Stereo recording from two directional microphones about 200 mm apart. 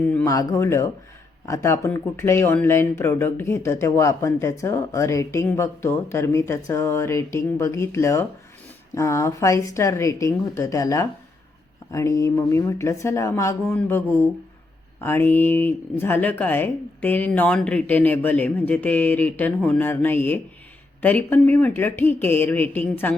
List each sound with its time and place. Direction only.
0.1 s speech: 15° left (ahead or behind)
15.0 s speech: 10° left (ahead or behind)